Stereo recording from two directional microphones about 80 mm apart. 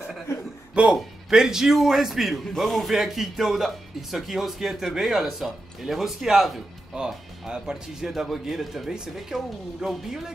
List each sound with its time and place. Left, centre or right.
0.3 s chuckle: left
0.9 s a man's voice: centre